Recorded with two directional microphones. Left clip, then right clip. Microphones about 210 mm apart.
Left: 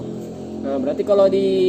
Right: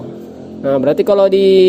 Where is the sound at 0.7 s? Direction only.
55° right (ahead or behind).